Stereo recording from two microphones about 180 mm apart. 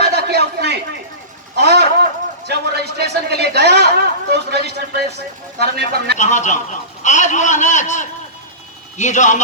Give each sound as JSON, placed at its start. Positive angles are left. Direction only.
{"t": 0.0, "sound": "a sound", "side_deg": -65}
{"t": 4.3, "sound": "a man's voice", "side_deg": -65}
{"t": 6.1, "sound": "a man's voice", "side_deg": 40}